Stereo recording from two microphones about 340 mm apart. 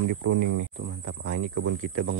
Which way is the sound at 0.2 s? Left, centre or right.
Right.